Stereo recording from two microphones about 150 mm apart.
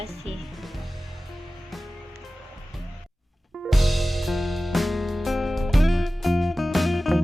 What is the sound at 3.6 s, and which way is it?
Music, centre (ahead or behind).